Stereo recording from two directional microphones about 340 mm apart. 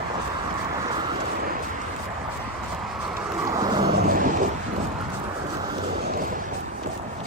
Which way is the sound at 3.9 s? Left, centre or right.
Right.